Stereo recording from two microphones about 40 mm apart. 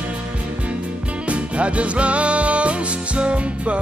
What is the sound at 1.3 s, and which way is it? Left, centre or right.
Music, right.